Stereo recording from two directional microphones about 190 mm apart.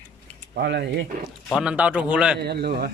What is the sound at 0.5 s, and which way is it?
Speech, 65° right (ahead or behind).